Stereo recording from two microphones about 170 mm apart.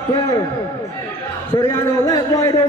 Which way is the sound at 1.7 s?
15° left (ahead or behind).